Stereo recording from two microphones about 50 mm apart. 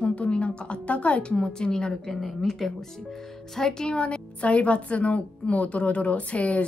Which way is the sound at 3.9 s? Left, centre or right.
Left.